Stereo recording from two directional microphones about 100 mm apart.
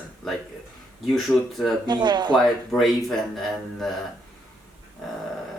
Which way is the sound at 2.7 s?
Centre (ahead or behind).